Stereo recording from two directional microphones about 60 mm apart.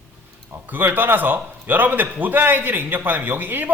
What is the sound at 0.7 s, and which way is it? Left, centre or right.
A man's voice, right.